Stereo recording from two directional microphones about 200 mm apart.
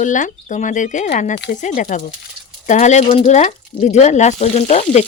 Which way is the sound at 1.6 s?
40° left (ahead or behind).